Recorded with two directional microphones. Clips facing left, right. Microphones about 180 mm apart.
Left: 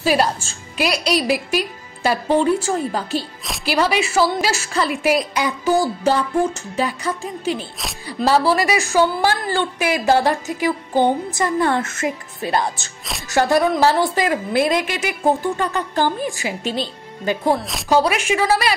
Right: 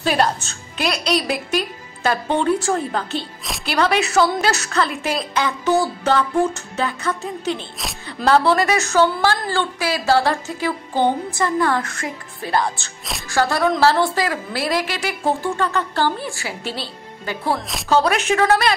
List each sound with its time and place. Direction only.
0.0 s a woman's voice: 5° left (ahead or behind)